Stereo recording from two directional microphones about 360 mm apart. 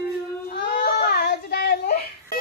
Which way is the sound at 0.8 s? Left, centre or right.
Left.